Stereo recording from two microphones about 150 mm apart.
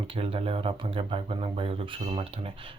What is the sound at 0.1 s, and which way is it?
Speech, 40° right (ahead or behind).